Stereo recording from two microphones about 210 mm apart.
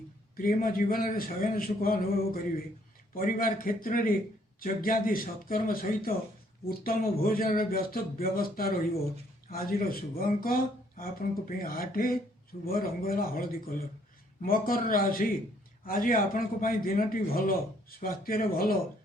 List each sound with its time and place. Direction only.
0.3 s a man's voice: 40° left (ahead or behind)